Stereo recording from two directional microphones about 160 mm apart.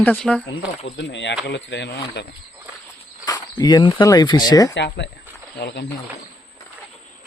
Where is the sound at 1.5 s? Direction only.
90° left.